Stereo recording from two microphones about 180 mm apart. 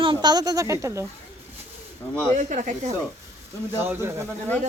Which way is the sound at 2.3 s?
45° right (ahead or behind).